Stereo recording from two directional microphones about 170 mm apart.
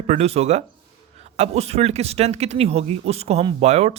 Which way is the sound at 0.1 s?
40° right (ahead or behind).